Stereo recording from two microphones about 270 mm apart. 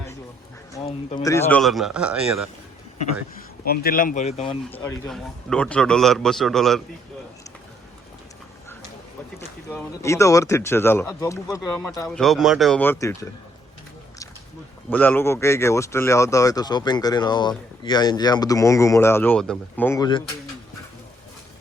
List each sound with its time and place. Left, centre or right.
1.2 s a man's voice: centre
3.6 s speech: left
4.8 s a man's voice: centre
9.6 s speech: centre
14.8 s speech: centre